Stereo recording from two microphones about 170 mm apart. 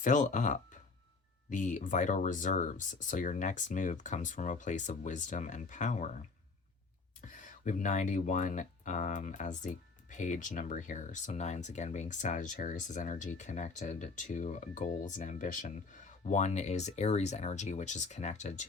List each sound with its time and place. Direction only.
0.0 s speech: 45° left (ahead or behind)
7.2 s speech: 50° left (ahead or behind)